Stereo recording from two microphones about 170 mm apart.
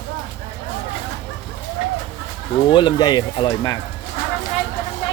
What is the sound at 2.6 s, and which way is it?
A man's voice, 25° left (ahead or behind).